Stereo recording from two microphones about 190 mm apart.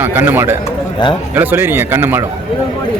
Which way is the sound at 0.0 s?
10° right (ahead or behind).